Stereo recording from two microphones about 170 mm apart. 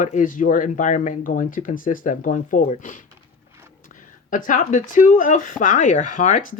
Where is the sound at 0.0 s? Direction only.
50° left (ahead or behind).